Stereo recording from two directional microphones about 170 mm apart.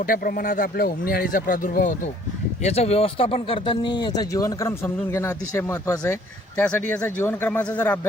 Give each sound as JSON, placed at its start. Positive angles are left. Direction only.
{"t": 0.1, "sound": "speech", "side_deg": 60}
{"t": 2.6, "sound": "speech", "side_deg": 40}